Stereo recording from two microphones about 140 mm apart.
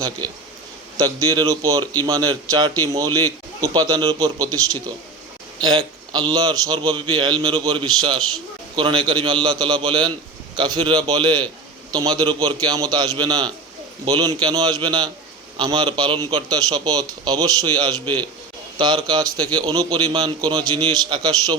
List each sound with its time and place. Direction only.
0.9 s a man's voice: 25° right (ahead or behind)
1.8 s speech: 15° left (ahead or behind)
2.0 s a man's voice: 25° right (ahead or behind)